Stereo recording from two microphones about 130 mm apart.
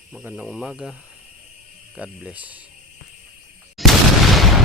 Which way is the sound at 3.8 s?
Centre (ahead or behind).